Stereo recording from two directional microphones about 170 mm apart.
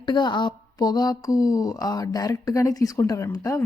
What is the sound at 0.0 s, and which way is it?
A woman's voice, 25° left (ahead or behind).